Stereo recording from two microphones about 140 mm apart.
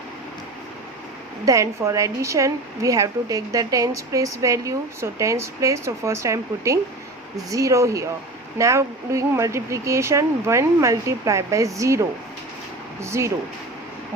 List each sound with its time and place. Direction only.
1.5 s a woman's voice: 20° right (ahead or behind)